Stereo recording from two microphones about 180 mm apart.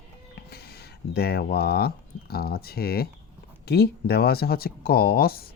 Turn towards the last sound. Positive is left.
turn(degrees=55)  # may be behind; listen again after turning